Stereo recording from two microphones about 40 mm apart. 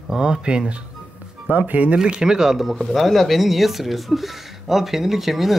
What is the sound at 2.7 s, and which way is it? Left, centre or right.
Speech, centre.